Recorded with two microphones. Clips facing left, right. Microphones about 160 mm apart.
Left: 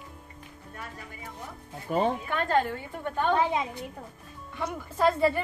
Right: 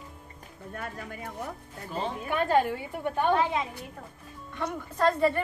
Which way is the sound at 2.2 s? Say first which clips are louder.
Right 2 dB; 10° right (ahead or behind).